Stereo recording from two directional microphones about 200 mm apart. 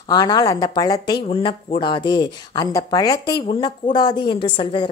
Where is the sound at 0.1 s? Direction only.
20° left (ahead or behind).